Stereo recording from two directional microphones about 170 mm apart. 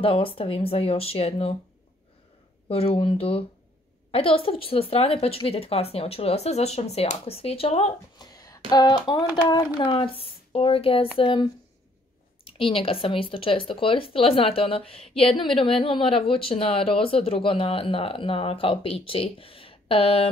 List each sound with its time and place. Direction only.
0.0 s speech: 35° left (ahead or behind)
2.7 s speech: 35° left (ahead or behind)
8.2 s speech: 25° left (ahead or behind)
12.4 s speech: 30° left (ahead or behind)